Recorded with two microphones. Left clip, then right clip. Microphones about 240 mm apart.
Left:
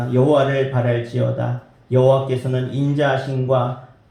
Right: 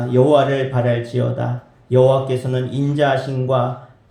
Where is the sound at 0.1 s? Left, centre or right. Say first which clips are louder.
Right 2 dB; right.